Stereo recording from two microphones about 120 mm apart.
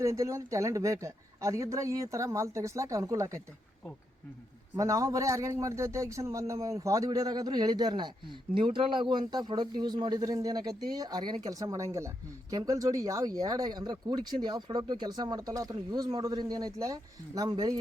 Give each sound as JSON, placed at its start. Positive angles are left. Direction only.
{"t": 0.0, "sound": "speech", "side_deg": -25}
{"t": 4.8, "sound": "a man's voice", "side_deg": -30}